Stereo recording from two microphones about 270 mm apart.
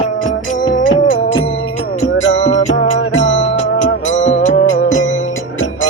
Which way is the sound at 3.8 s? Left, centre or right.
Left.